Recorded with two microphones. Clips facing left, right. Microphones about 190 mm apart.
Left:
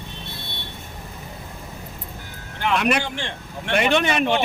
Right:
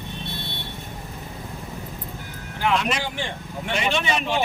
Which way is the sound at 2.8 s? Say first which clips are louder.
Left 5 dB; 60° left (ahead or behind).